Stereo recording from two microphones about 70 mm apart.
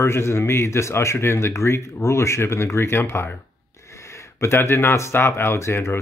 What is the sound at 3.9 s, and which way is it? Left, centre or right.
Speech, left.